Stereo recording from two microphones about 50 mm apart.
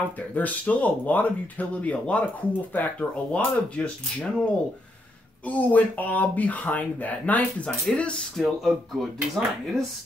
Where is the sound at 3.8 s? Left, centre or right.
Centre.